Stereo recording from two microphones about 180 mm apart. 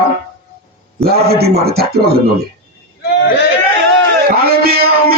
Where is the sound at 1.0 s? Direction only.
60° right (ahead or behind).